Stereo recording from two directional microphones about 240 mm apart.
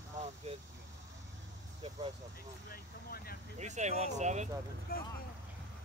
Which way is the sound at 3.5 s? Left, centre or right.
Right.